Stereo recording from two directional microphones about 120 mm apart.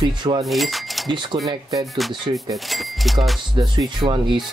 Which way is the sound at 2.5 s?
Centre (ahead or behind).